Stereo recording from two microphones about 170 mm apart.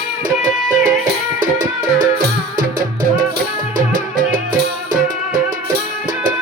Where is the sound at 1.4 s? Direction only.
50° right (ahead or behind).